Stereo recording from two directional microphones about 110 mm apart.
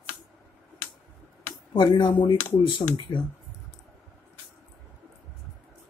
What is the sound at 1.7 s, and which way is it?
Speech, 45° left (ahead or behind).